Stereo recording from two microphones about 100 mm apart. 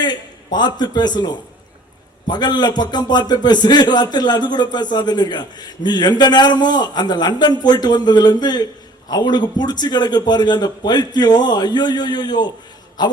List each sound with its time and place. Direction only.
0.0 s a man's voice: 45° left (ahead or behind)